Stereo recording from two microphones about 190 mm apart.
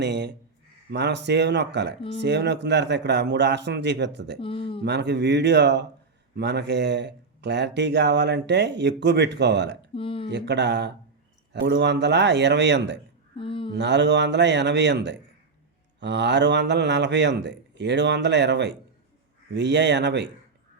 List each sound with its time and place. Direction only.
0.0 s speech: 65° right (ahead or behind)
4.4 s speech: 30° left (ahead or behind)
4.8 s speech: 65° right (ahead or behind)
9.9 s speech: 30° left (ahead or behind)
10.2 s a man's voice: 65° right (ahead or behind)
13.3 s a sound: 25° left (ahead or behind)
13.7 s a man's voice: 65° right (ahead or behind)